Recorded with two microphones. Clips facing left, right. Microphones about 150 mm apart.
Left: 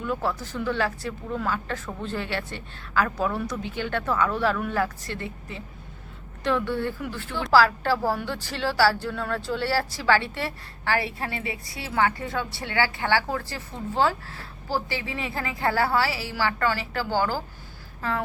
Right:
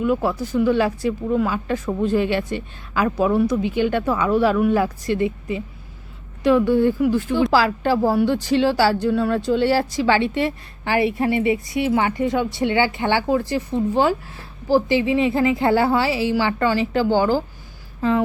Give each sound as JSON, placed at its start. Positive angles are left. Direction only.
{"t": 0.0, "sound": "a woman's voice", "side_deg": -15}
{"t": 6.7, "sound": "a woman's voice", "side_deg": -15}